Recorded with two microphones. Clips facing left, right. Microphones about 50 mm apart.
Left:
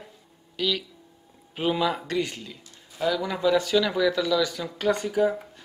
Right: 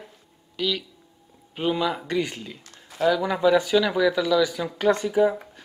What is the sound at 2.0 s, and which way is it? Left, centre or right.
Speech, centre.